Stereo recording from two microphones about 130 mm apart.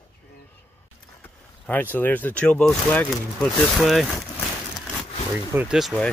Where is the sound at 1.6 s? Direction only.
15° left (ahead or behind).